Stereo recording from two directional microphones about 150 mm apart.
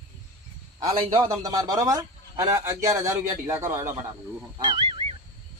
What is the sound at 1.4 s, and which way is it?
A man's voice, 25° right (ahead or behind).